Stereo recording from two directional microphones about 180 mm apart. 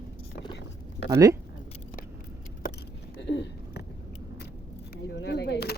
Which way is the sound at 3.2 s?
80° left.